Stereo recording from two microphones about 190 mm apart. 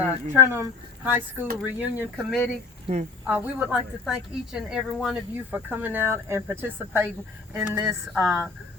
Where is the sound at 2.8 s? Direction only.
35° right (ahead or behind).